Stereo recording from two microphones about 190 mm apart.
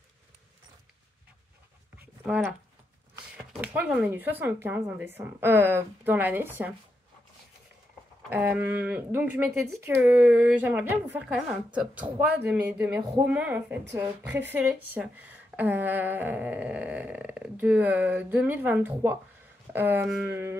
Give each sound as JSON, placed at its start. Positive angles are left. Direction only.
{"t": 2.0, "sound": "a sound", "side_deg": -5}
{"t": 3.6, "sound": "a woman's voice", "side_deg": -5}
{"t": 8.3, "sound": "a woman's voice", "side_deg": -10}